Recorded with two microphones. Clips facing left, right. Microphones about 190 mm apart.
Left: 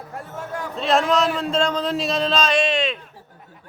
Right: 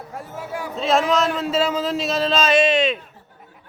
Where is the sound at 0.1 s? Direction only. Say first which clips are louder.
Even; centre (ahead or behind).